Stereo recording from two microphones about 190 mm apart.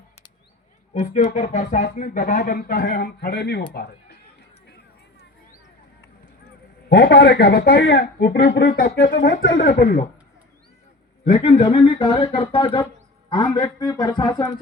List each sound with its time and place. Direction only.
0.9 s speech: 40° left (ahead or behind); by 4.2 s 55° left (ahead or behind)
6.8 s speech: 60° left (ahead or behind); by 9.9 s 45° left (ahead or behind)
11.4 s a man's voice: 35° left (ahead or behind)